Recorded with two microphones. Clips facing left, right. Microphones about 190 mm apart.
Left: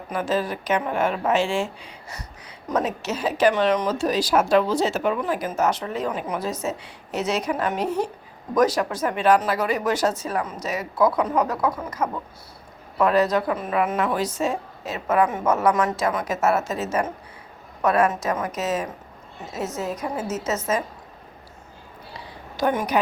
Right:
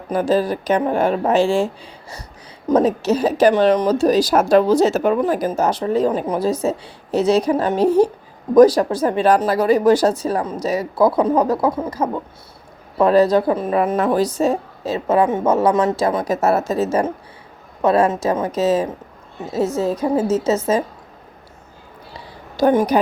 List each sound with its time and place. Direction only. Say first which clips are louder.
0.1 s a woman's voice: right 7 dB; 35° right (ahead or behind)
22.5 s speech: right 8 dB; 35° right (ahead or behind)